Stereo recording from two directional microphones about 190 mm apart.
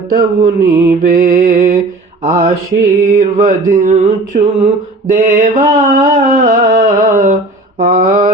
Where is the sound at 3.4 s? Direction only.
45° right (ahead or behind).